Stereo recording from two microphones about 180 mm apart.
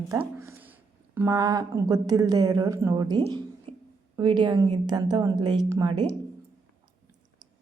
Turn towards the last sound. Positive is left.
turn(degrees=-30)  # may be behind; listen again after turning